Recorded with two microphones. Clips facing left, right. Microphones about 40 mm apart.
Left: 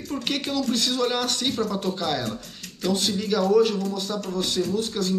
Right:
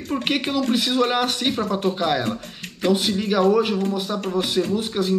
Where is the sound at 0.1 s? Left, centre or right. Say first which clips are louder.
Right 5 dB; right.